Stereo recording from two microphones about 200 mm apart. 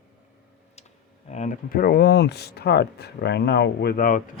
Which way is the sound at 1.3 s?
35° left (ahead or behind).